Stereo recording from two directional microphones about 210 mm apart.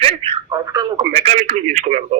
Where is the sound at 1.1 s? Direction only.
30° right (ahead or behind).